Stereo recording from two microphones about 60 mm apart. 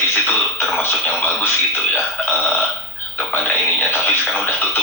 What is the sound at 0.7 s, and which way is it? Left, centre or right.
Speech, left.